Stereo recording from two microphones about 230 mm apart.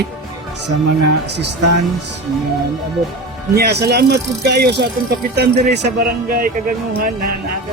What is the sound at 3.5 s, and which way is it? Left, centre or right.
A woman's voice, right.